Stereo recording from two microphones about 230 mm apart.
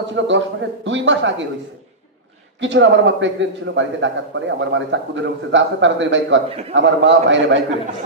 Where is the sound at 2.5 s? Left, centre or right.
Right.